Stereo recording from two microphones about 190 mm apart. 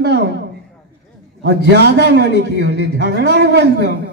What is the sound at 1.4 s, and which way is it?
A man's voice, 60° right (ahead or behind).